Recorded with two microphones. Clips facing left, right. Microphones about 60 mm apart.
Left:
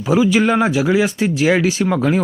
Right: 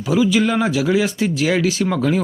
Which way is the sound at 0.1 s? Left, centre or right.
Left.